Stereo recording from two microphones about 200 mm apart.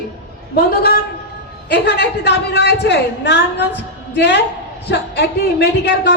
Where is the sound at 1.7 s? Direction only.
55° left (ahead or behind).